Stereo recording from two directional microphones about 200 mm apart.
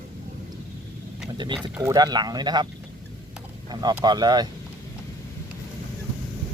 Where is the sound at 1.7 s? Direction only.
15° right (ahead or behind).